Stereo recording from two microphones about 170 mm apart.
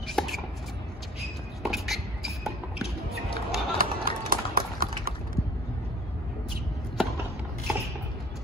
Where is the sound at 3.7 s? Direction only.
60° right (ahead or behind).